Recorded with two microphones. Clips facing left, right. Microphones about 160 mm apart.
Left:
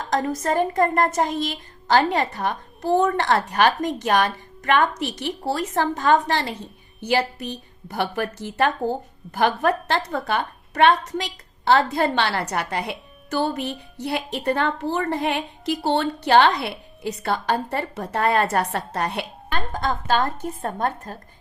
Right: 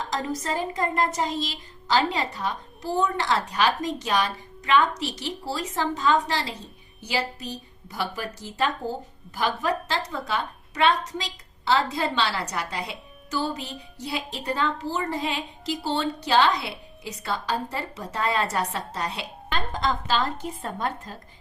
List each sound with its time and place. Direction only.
0.1 s a woman's voice: 55° left (ahead or behind)